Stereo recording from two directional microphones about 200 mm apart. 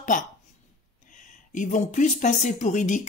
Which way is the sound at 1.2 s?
40° left (ahead or behind).